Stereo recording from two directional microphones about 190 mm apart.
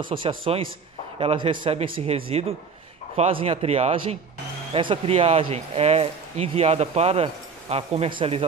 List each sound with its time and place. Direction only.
0.1 s a man's voice: 25° right (ahead or behind)